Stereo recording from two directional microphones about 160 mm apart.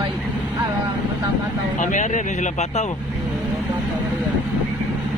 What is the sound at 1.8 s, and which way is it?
Speech, 50° left (ahead or behind).